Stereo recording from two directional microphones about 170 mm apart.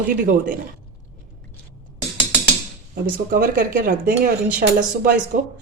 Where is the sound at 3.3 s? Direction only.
60° right (ahead or behind).